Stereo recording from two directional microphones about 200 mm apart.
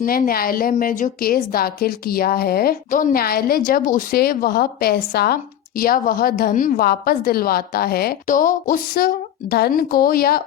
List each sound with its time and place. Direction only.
0.0 s a woman's voice: 45° left (ahead or behind)